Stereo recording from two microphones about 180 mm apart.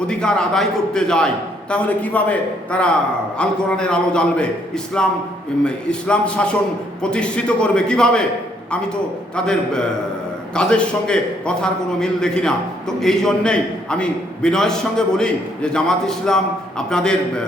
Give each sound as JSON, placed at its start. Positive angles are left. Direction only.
{"t": 0.1, "sound": "a man's voice", "side_deg": 5}
{"t": 9.3, "sound": "a man's voice", "side_deg": 5}